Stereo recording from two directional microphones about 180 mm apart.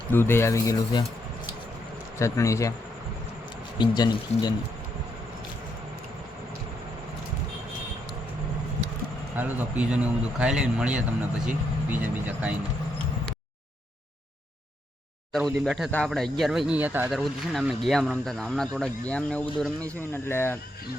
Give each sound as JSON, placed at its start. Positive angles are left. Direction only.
{"t": 0.1, "sound": "speech", "side_deg": 10}
{"t": 2.1, "sound": "speech", "side_deg": 15}
{"t": 3.8, "sound": "speech", "side_deg": 25}
{"t": 9.3, "sound": "speech", "side_deg": -10}
{"t": 15.3, "sound": "speech", "side_deg": 0}